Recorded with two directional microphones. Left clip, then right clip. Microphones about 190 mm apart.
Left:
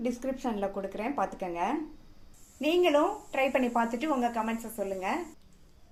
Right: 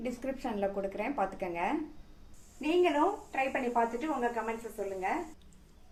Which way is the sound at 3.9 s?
50° left (ahead or behind).